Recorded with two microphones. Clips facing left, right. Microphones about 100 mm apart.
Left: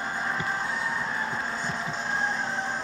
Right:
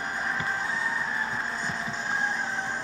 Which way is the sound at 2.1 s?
15° right (ahead or behind).